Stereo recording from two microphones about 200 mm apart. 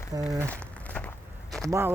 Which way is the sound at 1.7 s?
10° right (ahead or behind).